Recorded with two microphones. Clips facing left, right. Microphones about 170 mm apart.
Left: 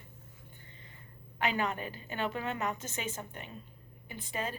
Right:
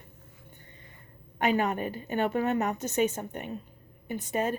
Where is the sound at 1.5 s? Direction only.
50° right (ahead or behind).